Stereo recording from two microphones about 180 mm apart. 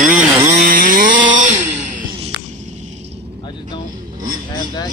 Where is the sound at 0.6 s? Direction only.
50° right (ahead or behind).